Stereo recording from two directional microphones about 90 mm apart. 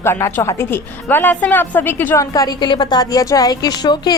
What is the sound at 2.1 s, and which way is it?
Speech, 40° left (ahead or behind).